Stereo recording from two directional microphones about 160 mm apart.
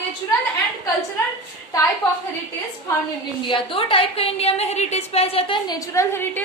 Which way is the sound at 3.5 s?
30° left (ahead or behind).